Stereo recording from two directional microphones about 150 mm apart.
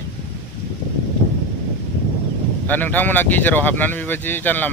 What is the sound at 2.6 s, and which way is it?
Speech, 10° left (ahead or behind).